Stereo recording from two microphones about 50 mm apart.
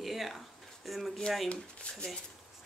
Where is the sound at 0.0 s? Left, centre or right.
Centre.